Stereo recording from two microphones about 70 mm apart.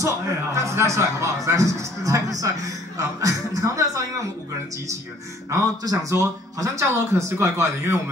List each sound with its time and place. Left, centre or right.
0.6 s a man's voice: right
5.5 s a man's voice: right